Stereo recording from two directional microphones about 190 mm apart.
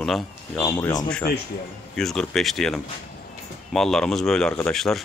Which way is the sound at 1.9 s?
5° left (ahead or behind).